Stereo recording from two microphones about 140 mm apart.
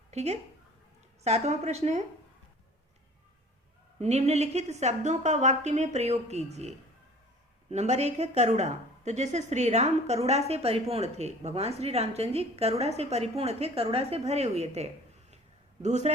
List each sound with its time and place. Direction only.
0.1 s a woman's voice: 50° right (ahead or behind)
4.0 s a woman's voice: 50° right (ahead or behind)